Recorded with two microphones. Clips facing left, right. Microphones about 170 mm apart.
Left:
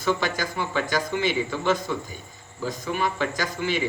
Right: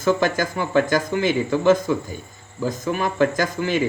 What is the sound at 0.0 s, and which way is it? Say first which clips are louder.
Speech: right 6 dB; 50° right (ahead or behind).